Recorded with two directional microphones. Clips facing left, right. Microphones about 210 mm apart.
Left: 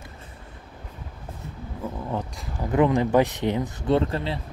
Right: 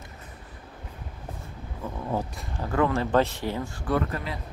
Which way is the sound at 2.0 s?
5° right (ahead or behind).